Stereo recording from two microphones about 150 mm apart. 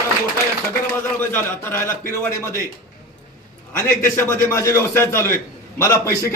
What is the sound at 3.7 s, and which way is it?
A man's voice, 15° left (ahead or behind).